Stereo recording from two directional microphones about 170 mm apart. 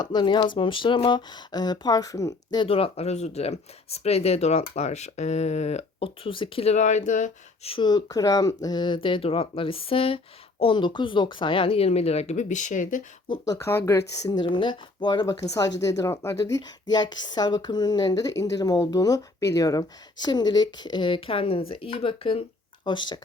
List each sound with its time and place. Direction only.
0.0 s speech: 25° left (ahead or behind); by 13.0 s 50° left (ahead or behind)
13.2 s speech: 25° left (ahead or behind)